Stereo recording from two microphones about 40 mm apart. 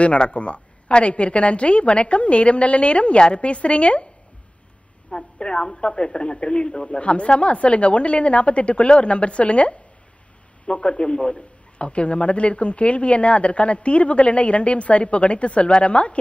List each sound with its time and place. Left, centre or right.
0.0 s a man's voice: left
5.1 s a man's voice: left